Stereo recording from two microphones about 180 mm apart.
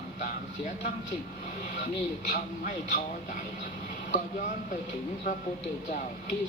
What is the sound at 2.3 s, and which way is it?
Speech, 45° left (ahead or behind).